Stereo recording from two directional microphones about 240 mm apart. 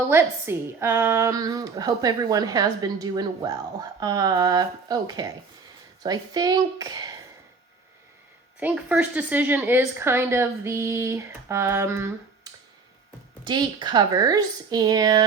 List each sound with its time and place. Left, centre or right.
0.1 s a woman's voice: centre
8.5 s a woman's voice: centre
13.4 s a woman's voice: centre